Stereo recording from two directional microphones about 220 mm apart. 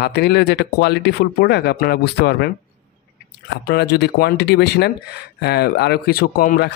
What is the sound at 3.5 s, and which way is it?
Speech, 45° left (ahead or behind).